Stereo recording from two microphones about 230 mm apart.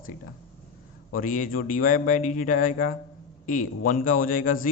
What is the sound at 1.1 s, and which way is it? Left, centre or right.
Speech, left.